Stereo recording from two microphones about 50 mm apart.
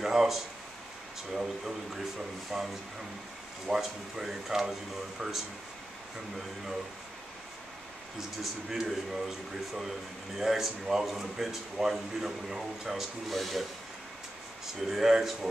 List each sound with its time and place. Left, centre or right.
0.0 s a sound: centre
1.3 s a man's voice: centre
8.4 s a man's voice: centre
14.8 s a man's voice: centre